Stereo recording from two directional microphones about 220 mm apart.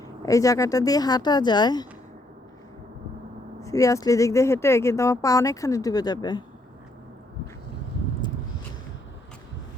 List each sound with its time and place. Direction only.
0.2 s speech: 15° left (ahead or behind)
3.6 s speech: 15° left (ahead or behind)